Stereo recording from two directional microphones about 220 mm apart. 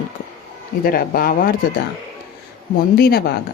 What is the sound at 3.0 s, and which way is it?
Speech, 45° left (ahead or behind).